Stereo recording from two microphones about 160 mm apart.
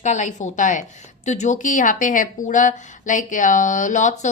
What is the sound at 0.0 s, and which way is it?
A woman's voice, 50° left (ahead or behind).